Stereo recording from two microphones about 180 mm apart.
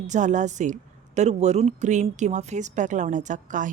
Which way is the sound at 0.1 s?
40° right (ahead or behind).